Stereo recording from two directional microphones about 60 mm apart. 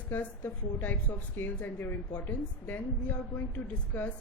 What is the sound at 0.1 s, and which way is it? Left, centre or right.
A woman's voice, left.